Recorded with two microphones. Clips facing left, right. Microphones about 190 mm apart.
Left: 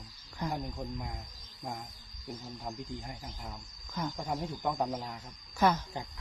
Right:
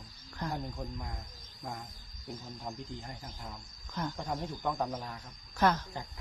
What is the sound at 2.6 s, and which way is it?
Speech, centre (ahead or behind).